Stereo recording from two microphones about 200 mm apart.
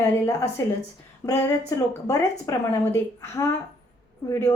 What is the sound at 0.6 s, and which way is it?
A woman's voice, 15° left (ahead or behind).